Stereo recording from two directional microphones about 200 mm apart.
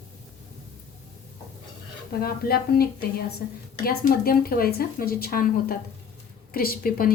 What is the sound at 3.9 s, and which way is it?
Speech, 45° left (ahead or behind).